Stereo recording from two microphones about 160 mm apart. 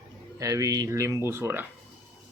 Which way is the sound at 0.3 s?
20° right (ahead or behind).